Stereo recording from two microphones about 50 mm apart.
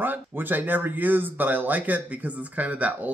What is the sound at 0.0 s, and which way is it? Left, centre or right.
Speech, right.